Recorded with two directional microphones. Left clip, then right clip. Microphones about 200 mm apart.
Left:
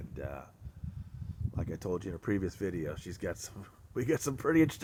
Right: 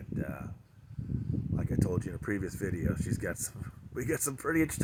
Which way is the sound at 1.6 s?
35° right (ahead or behind).